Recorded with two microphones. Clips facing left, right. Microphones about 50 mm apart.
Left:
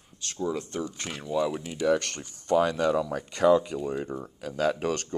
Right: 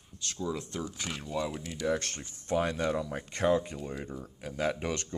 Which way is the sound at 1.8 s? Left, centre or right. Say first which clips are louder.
Left 6 dB; left.